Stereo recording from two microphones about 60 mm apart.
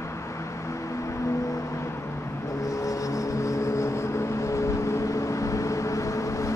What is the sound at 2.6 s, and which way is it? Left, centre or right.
Vehicle, left.